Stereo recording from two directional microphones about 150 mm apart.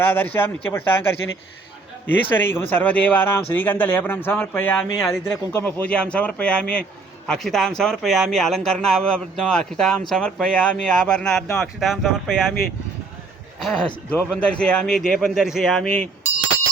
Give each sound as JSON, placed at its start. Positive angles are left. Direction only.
{"t": 0.0, "sound": "speech", "side_deg": 15}
{"t": 2.3, "sound": "speech", "side_deg": 15}
{"t": 13.6, "sound": "speech", "side_deg": 5}